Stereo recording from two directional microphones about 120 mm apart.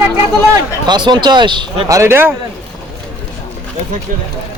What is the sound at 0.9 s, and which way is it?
Speech, 40° right (ahead or behind).